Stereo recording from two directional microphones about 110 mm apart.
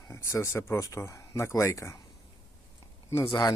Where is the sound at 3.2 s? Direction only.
35° left (ahead or behind).